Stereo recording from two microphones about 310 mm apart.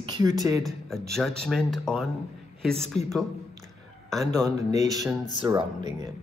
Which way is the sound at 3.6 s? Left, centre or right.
Centre.